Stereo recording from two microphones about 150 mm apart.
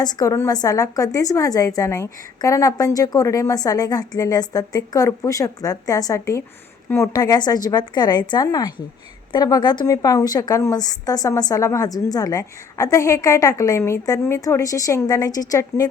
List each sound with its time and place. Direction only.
0.0 s a woman's voice: 25° left (ahead or behind)